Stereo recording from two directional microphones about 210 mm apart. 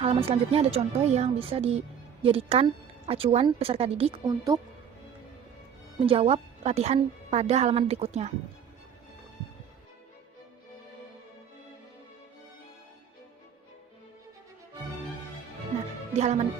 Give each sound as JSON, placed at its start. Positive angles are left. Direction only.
{"t": 0.0, "sound": "speech", "side_deg": -25}
{"t": 6.0, "sound": "a woman's voice", "side_deg": -30}
{"t": 16.1, "sound": "a woman's voice", "side_deg": -30}